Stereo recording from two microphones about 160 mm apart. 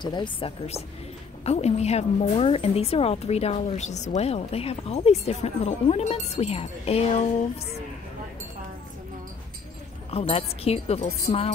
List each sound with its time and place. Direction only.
0.0 s speech: 30° left (ahead or behind)
1.4 s a woman's voice: 40° left (ahead or behind)
10.1 s a woman's voice: 40° left (ahead or behind)